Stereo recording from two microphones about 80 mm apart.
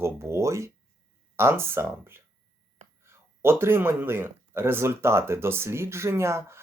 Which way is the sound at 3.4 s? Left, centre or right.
Right.